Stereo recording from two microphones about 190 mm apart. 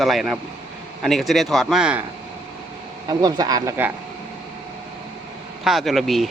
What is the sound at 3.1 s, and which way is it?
Speech, 20° right (ahead or behind).